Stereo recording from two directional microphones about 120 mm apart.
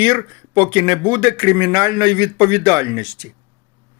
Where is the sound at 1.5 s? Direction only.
25° right (ahead or behind).